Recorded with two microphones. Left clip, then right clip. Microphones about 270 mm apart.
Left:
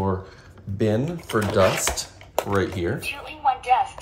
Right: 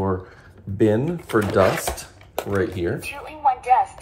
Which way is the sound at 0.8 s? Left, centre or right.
Right.